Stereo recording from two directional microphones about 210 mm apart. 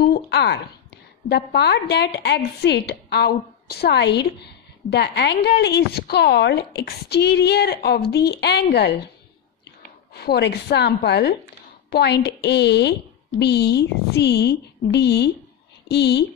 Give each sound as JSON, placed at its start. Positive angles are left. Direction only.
{"t": 0.0, "sound": "a woman's voice", "side_deg": 50}
{"t": 10.1, "sound": "a woman's voice", "side_deg": 50}